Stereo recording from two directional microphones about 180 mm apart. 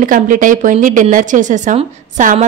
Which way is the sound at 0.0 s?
45° right (ahead or behind).